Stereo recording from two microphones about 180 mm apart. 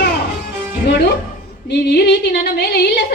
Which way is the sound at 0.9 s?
65° left (ahead or behind).